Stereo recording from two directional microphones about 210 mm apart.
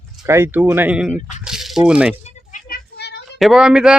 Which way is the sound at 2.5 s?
45° left (ahead or behind).